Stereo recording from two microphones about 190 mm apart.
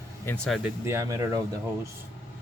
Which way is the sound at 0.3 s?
5° left (ahead or behind).